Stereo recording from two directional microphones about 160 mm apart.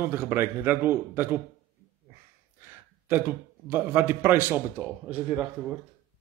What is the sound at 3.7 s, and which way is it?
A man's voice, 10° right (ahead or behind).